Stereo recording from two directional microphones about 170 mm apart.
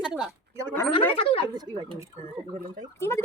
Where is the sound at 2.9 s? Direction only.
15° left (ahead or behind).